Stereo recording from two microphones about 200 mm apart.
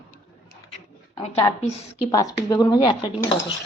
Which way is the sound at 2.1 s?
20° left (ahead or behind).